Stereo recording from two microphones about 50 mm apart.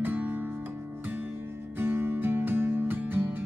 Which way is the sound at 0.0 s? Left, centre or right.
Right.